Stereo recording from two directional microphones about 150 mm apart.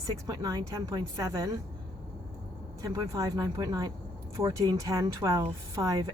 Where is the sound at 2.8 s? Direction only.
20° right (ahead or behind).